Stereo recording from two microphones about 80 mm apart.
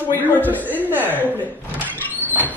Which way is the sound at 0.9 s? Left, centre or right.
Right.